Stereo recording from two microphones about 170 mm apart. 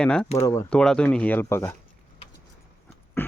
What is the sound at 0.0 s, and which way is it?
Speech, 5° left (ahead or behind).